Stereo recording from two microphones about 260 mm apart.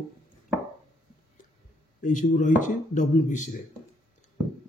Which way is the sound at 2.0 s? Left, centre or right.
Left.